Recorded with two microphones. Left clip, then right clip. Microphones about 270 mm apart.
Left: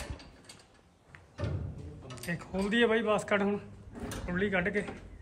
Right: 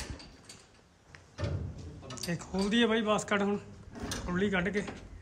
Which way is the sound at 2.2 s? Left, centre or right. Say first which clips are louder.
Even; centre.